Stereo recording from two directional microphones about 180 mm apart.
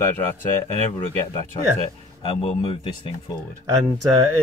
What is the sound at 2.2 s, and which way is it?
Speech, 30° left (ahead or behind).